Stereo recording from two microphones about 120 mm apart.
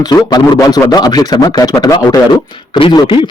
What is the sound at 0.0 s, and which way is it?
A man's voice, 30° left (ahead or behind).